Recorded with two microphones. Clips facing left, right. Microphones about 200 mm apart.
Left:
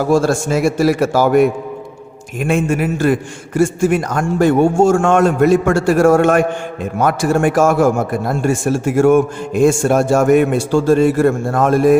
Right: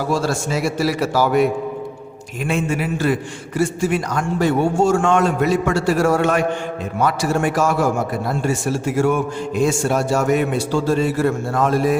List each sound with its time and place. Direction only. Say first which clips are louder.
0.1 s a man's voice: left 8 dB; 50° left (ahead or behind)